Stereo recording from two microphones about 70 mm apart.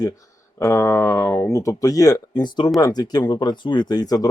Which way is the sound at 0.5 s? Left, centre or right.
Left.